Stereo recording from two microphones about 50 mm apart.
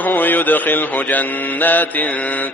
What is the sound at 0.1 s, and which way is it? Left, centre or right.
Mantra, left.